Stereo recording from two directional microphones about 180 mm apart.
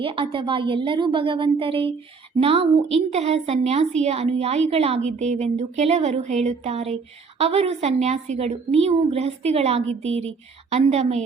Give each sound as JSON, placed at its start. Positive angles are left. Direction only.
{"t": 0.0, "sound": "a woman's voice", "side_deg": -30}